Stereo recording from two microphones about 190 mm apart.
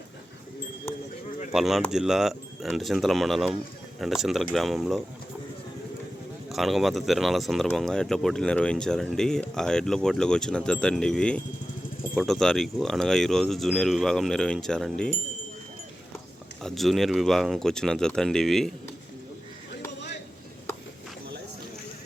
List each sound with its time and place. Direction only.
1.5 s speech: centre (ahead or behind)
6.5 s speech: centre (ahead or behind)
16.6 s speech: centre (ahead or behind)